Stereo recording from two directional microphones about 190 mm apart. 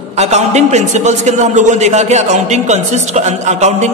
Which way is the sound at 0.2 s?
35° right (ahead or behind).